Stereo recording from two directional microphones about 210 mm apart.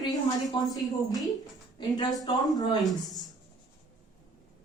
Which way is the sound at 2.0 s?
20° left (ahead or behind).